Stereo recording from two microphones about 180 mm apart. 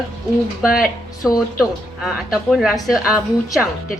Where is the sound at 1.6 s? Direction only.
Centre (ahead or behind).